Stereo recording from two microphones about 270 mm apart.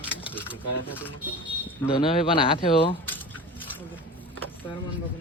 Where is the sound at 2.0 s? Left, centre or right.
Centre.